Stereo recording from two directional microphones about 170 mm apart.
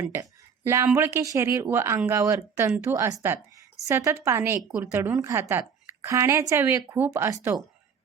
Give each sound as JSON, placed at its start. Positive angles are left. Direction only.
{"t": 0.0, "sound": "a woman's voice", "side_deg": -15}